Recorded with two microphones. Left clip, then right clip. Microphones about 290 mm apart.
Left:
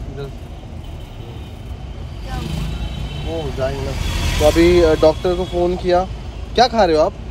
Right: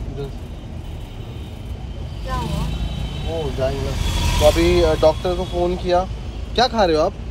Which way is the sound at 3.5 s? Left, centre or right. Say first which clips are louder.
Left 1 dB; left.